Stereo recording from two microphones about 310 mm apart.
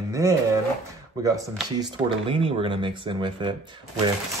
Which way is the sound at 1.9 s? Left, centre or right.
Centre.